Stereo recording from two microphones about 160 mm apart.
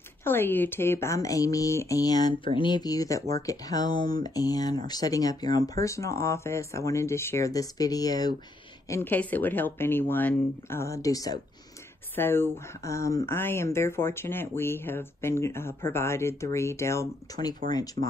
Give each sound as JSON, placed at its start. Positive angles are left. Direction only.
{"t": 0.2, "sound": "speech", "side_deg": 15}
{"t": 18.0, "sound": "speech", "side_deg": 30}